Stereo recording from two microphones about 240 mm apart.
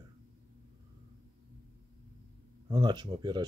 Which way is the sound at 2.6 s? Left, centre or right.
Centre.